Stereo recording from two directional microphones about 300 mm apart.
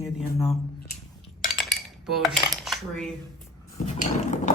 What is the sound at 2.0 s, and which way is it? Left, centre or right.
Dishes, centre.